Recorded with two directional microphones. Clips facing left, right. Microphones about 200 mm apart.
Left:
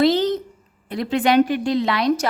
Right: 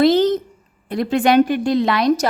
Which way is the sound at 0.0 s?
45° right (ahead or behind).